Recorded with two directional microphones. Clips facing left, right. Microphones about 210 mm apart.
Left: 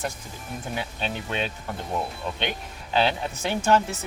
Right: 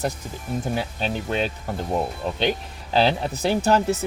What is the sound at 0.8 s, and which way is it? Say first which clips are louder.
Speech: right 4 dB; 40° right (ahead or behind).